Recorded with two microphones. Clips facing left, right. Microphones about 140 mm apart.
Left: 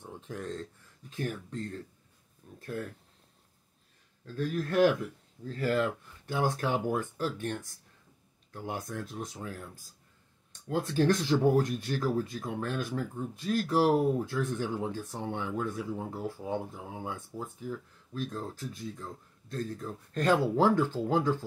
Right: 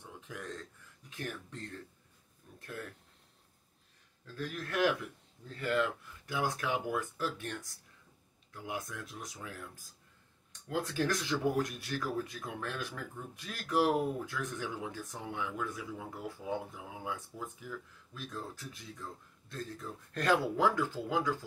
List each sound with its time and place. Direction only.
0.0 s a sound: 35° left (ahead or behind)
1.1 s speech: 35° left (ahead or behind)
4.4 s speech: 35° left (ahead or behind)
10.7 s speech: 35° left (ahead or behind)
19.5 s speech: 35° left (ahead or behind)